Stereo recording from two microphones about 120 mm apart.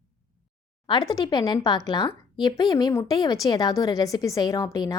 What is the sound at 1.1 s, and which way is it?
A woman's voice, 35° left (ahead or behind).